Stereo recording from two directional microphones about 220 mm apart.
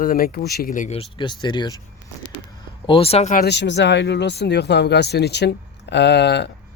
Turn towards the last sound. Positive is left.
turn(degrees=50)  # may be behind; listen again after turning